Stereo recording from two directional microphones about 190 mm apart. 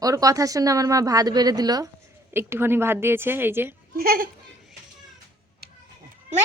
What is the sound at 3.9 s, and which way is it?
Speech, 50° right (ahead or behind).